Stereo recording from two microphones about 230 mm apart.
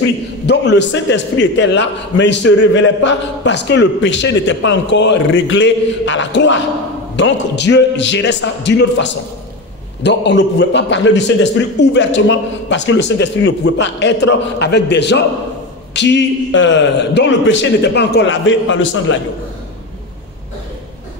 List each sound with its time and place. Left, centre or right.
0.5 s a man's voice: left